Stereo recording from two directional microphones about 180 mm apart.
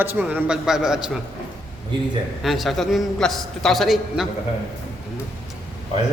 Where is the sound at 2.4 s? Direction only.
Centre (ahead or behind).